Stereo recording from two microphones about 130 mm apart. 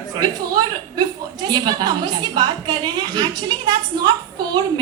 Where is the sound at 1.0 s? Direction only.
30° right (ahead or behind).